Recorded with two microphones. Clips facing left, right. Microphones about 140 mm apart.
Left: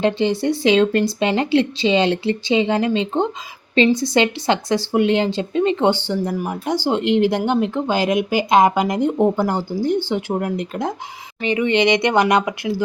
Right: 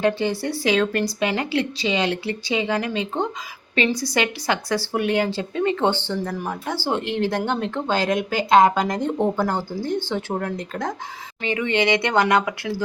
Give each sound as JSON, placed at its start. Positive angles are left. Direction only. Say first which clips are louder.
{"t": 0.0, "sound": "speech", "louder": "left 3 dB", "side_deg": 20}